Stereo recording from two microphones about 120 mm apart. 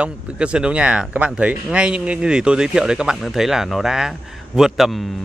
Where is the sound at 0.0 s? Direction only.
10° right (ahead or behind).